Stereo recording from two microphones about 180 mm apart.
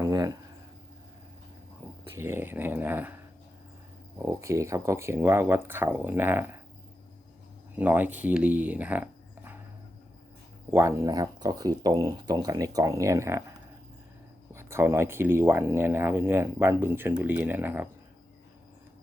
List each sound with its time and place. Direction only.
0.0 s insect: 20° right (ahead or behind)
2.1 s speech: 15° right (ahead or behind)
4.3 s speech: 15° right (ahead or behind)
7.8 s speech: 10° right (ahead or behind)
10.7 s speech: 15° right (ahead or behind)
14.5 s speech: 15° right (ahead or behind)